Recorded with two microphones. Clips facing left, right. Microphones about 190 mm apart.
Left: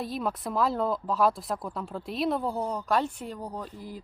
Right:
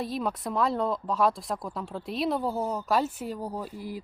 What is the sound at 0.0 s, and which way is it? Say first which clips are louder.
Speech: right 1 dB; centre (ahead or behind).